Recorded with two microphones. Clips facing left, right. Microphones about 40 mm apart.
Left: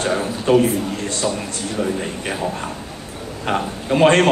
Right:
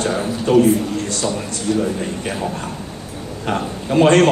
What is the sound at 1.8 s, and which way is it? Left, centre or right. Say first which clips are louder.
A man's voice: right 2 dB; centre.